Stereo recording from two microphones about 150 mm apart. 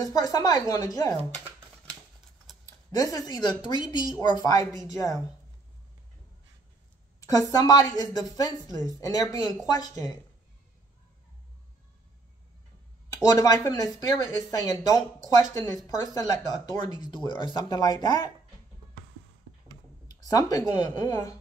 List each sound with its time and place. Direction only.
0.0 s speech: 25° left (ahead or behind)
2.6 s speech: 25° left (ahead or behind)
7.2 s speech: 25° left (ahead or behind)
13.2 s speech: 25° left (ahead or behind)
19.7 s speech: 25° left (ahead or behind)